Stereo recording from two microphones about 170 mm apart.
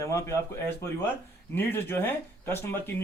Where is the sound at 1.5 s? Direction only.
15° left (ahead or behind).